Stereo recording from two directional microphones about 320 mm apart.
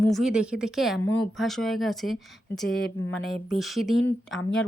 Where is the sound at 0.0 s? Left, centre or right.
Centre.